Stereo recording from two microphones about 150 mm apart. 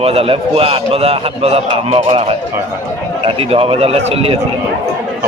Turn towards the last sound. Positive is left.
turn(degrees=-40)  # may be behind; listen again after turning